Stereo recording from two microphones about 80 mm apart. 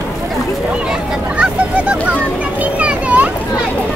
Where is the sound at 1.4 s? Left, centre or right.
Centre.